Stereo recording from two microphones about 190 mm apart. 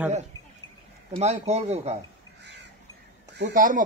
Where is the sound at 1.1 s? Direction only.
35° right (ahead or behind).